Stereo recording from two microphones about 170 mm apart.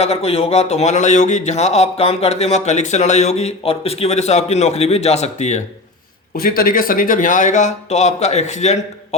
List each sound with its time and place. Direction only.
0.0 s speech: 35° left (ahead or behind)
6.4 s speech: 55° left (ahead or behind)